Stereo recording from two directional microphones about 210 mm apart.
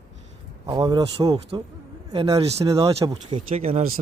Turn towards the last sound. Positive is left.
turn(degrees=-35)  # may be behind; listen again after turning